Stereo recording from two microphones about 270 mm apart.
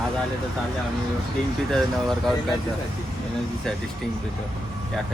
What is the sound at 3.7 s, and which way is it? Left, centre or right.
Speech, centre.